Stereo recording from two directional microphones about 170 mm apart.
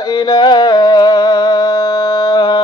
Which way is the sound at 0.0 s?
25° left (ahead or behind).